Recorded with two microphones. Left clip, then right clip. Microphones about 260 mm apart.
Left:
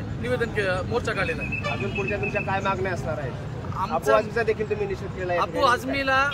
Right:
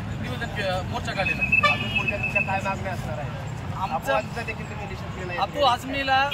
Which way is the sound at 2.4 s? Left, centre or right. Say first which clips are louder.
Left 1 dB; centre.